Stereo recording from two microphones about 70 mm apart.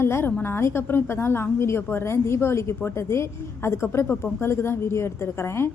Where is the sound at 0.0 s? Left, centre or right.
Left.